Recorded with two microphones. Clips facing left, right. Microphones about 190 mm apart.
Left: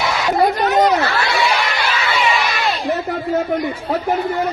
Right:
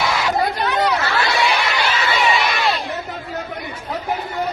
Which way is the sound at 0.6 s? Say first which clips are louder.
Left 5 dB; 40° left (ahead or behind).